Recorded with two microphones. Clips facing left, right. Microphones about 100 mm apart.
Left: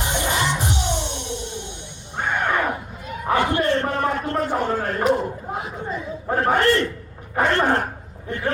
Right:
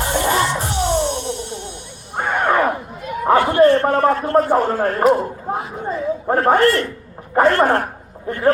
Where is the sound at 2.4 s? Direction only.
40° right (ahead or behind).